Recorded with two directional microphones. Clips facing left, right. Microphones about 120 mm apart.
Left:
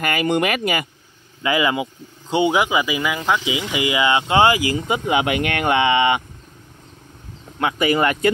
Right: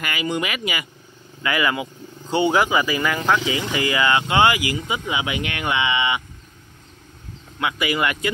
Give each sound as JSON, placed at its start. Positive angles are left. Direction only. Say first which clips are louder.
{"t": 0.0, "sound": "speech", "louder": "left 6 dB", "side_deg": 50}
{"t": 1.4, "sound": "speech", "louder": "left 3 dB", "side_deg": 25}
{"t": 4.8, "sound": "speech", "louder": "left 6 dB", "side_deg": 50}
{"t": 7.5, "sound": "speech", "louder": "left 4 dB", "side_deg": 40}